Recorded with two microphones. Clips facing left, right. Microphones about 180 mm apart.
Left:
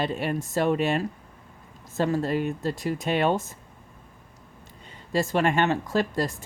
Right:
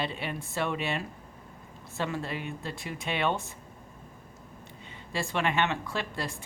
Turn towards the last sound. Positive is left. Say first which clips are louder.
# left 9 dB
turn(degrees=40)  # may be behind; listen again after turning